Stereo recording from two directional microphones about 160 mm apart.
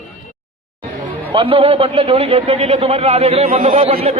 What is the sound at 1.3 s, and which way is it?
A man's voice, 35° right (ahead or behind).